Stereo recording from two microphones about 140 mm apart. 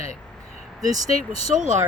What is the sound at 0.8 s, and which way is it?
Speech, 25° right (ahead or behind).